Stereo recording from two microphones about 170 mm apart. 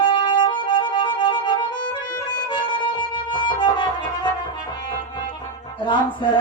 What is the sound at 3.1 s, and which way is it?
Music, 25° left (ahead or behind).